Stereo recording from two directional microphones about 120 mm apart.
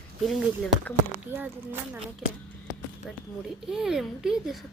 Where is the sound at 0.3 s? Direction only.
Centre (ahead or behind).